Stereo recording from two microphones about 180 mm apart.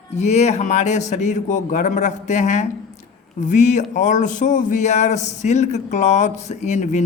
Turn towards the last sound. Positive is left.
turn(degrees=40)  # may be behind; listen again after turning